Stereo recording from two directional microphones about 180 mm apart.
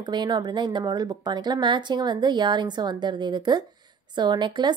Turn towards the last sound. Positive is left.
turn(degrees=-25)  # may be behind; listen again after turning